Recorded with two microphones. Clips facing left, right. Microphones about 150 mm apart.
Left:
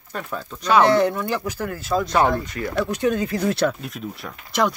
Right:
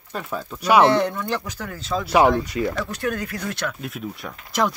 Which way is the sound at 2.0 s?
10° right (ahead or behind).